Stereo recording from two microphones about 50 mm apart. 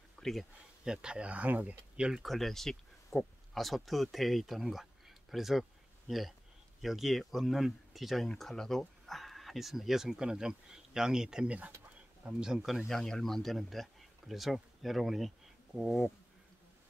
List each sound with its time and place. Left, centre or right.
0.2 s speech: centre
0.9 s speech: right
1.3 s speech: right
2.0 s speech: centre
2.2 s speech: centre
12.6 s speech: centre